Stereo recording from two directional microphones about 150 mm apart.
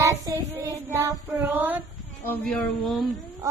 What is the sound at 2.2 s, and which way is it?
Speech, 15° left (ahead or behind).